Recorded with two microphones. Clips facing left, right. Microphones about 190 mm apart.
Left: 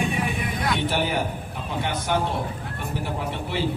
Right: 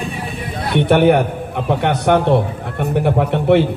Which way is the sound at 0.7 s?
65° right (ahead or behind).